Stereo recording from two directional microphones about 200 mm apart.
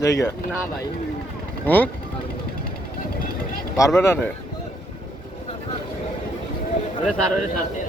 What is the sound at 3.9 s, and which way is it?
Speech, 10° left (ahead or behind).